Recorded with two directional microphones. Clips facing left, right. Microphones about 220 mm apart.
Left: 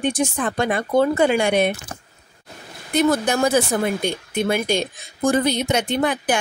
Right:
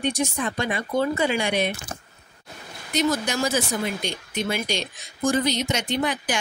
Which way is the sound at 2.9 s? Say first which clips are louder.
Left 5 dB; 55° left (ahead or behind).